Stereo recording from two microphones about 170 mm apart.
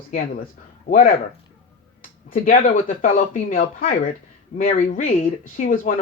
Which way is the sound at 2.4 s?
50° left (ahead or behind).